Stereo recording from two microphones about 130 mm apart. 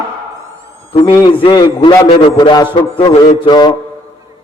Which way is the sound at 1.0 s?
35° left (ahead or behind).